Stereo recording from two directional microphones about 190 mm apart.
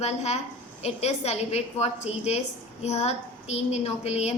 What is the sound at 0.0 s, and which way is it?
A woman's voice, 35° left (ahead or behind).